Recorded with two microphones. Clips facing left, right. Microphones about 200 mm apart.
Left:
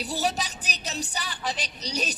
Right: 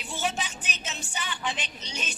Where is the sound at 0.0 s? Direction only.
40° left (ahead or behind).